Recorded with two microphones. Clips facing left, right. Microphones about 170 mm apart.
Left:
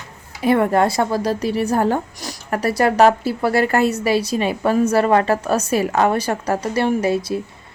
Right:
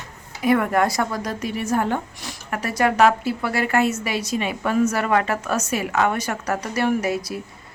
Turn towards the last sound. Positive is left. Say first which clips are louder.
# left 4 dB
turn(degrees=25)  # may be behind; listen again after turning